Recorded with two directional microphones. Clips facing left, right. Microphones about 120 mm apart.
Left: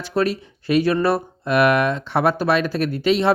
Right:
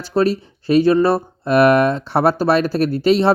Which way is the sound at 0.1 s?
30° right (ahead or behind).